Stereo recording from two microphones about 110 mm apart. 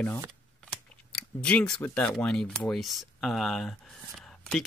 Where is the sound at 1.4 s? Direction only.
10° left (ahead or behind).